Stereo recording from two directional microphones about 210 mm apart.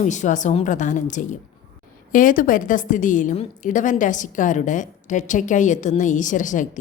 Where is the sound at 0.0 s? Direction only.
35° left (ahead or behind).